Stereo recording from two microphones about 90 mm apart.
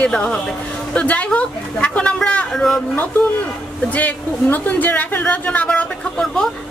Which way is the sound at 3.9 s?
20° left (ahead or behind).